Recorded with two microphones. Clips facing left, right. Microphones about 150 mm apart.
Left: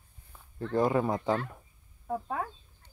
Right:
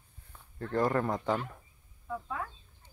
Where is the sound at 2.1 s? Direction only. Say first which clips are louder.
Left 4 dB; 45° left (ahead or behind).